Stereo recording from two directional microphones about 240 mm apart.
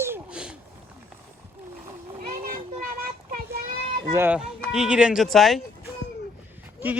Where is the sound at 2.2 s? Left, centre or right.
Right.